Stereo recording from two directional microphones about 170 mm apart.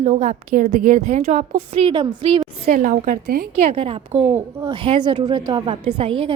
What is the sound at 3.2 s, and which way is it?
Speech, 60° right (ahead or behind).